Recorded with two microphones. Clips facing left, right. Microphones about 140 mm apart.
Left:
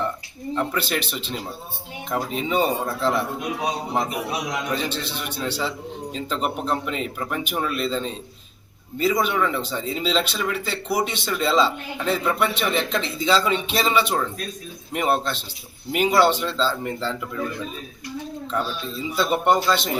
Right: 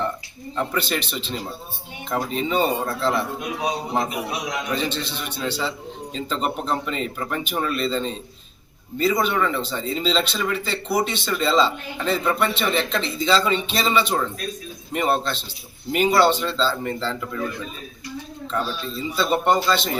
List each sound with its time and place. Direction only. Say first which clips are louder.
0.5 s speech: even; 5° left (ahead or behind)
4.7 s speech: right 1 dB; 10° left (ahead or behind)
19.1 s speech: even; 10° left (ahead or behind)